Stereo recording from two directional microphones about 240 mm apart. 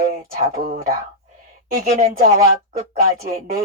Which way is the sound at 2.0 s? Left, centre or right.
Right.